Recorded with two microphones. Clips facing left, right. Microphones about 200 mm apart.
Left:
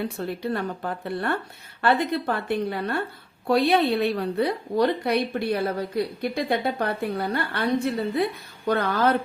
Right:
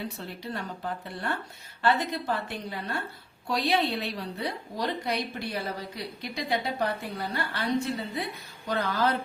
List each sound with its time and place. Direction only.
0.2 s a woman's voice: 55° left (ahead or behind)